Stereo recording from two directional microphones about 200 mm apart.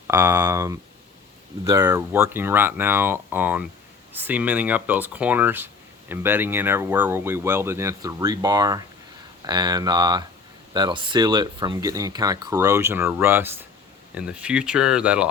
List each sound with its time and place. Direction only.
0.1 s speech: 10° right (ahead or behind)